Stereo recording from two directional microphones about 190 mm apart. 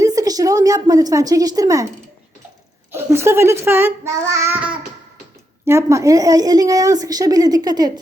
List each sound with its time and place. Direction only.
0.0 s a woman's voice: 20° right (ahead or behind)
2.9 s a child's voice: 15° right (ahead or behind)